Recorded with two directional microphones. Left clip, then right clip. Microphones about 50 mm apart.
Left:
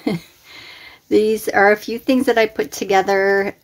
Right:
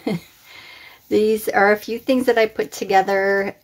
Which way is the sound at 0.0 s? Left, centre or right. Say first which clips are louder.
Left 2 dB; left.